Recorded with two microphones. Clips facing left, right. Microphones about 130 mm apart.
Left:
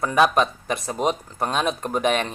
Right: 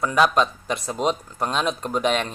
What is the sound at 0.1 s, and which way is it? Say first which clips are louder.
Speech: left 2 dB; 55° left (ahead or behind).